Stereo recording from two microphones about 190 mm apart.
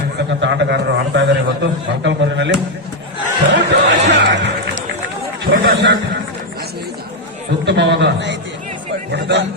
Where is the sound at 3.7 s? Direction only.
65° right (ahead or behind).